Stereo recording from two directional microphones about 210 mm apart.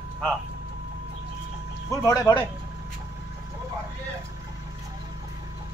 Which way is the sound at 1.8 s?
15° left (ahead or behind).